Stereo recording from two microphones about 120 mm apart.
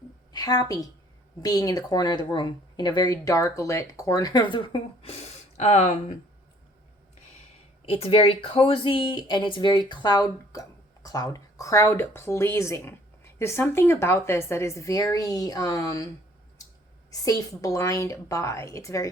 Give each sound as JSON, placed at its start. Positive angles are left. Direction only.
{"t": 0.3, "sound": "a woman's voice", "side_deg": 30}
{"t": 5.0, "sound": "speech", "side_deg": 60}
{"t": 7.9, "sound": "speech", "side_deg": 55}
{"t": 17.1, "sound": "speech", "side_deg": 30}